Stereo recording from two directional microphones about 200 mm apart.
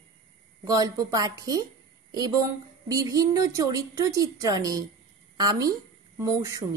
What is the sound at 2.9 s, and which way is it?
A woman's voice, 15° right (ahead or behind).